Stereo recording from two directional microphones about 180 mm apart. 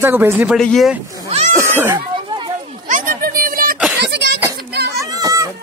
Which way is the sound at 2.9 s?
50° right (ahead or behind).